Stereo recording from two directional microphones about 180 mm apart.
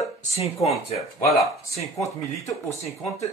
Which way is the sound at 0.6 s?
35° left (ahead or behind).